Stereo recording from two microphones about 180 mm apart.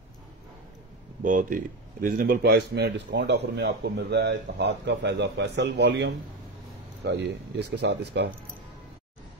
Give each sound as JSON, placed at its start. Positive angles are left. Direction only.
{"t": 1.2, "sound": "speech", "side_deg": -45}